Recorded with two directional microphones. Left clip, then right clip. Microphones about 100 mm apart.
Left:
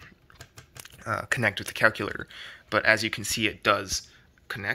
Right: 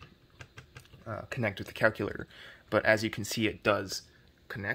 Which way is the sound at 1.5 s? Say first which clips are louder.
Left 5 dB; 15° right (ahead or behind).